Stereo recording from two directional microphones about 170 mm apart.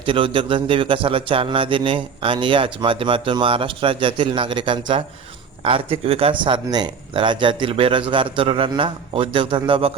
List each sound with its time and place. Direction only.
0.0 s speech: 30° right (ahead or behind)